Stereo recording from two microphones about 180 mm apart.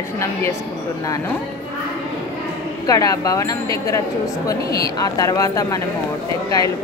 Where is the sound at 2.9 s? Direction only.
20° left (ahead or behind).